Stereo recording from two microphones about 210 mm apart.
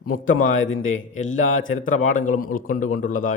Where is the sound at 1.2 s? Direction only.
35° left (ahead or behind).